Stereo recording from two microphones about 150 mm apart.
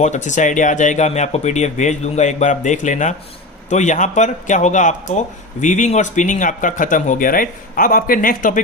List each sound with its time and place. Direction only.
0.0 s speech: 55° left (ahead or behind)